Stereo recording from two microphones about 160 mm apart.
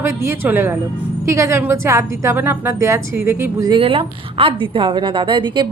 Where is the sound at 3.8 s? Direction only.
35° right (ahead or behind).